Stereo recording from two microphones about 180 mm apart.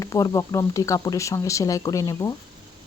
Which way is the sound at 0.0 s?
15° left (ahead or behind).